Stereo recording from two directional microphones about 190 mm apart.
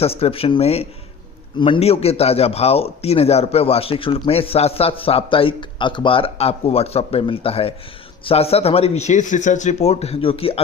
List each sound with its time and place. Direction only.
0.0 s a man's voice: 30° left (ahead or behind)